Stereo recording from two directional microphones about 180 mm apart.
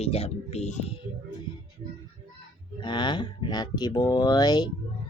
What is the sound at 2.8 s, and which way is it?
Speech, 25° left (ahead or behind).